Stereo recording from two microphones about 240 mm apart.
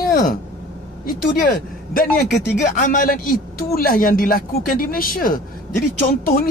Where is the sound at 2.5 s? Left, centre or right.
Left.